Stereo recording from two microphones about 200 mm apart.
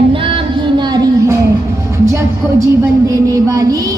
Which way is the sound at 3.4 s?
15° right (ahead or behind).